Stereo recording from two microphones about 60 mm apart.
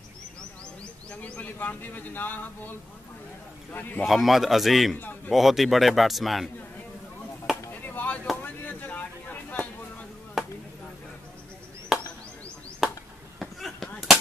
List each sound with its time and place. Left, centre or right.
1.2 s speech: left
4.0 s a man's voice: centre
7.8 s chop: left
8.4 s a sound: left
10.4 s chop: centre
11.9 s chop: centre
12.8 s a sound: centre
13.4 s chop: centre